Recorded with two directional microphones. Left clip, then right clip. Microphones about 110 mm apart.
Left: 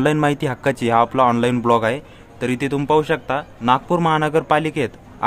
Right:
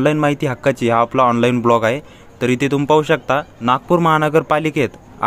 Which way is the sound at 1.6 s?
35° right (ahead or behind).